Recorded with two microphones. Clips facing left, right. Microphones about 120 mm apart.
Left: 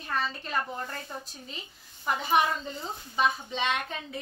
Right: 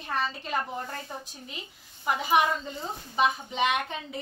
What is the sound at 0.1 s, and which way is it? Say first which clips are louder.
Speech: right 1 dB; 15° right (ahead or behind).